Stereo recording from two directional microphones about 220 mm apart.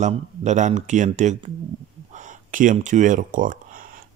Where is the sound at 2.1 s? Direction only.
35° right (ahead or behind).